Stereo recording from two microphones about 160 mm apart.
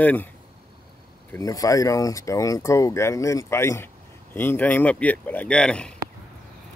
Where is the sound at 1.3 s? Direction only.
20° left (ahead or behind); by 5.9 s 5° left (ahead or behind).